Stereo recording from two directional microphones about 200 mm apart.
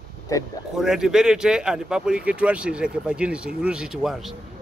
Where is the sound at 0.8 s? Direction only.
Centre (ahead or behind).